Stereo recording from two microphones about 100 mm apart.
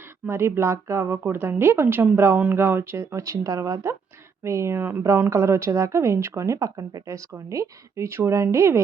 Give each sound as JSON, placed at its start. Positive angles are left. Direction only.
{"t": 0.3, "sound": "a woman's voice", "side_deg": -25}